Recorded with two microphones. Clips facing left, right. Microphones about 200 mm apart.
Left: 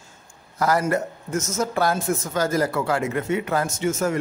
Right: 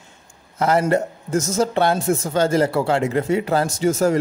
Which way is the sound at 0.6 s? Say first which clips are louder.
Right 3 dB; 25° right (ahead or behind).